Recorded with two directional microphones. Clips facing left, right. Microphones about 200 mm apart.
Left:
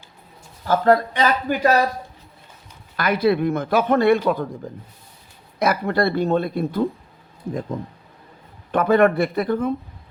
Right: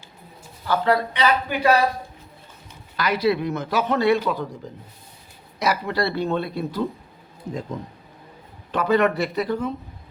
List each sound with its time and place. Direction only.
0.7 s speech: 45° left (ahead or behind)
3.0 s speech: 55° left (ahead or behind)
8.7 s speech: 55° left (ahead or behind)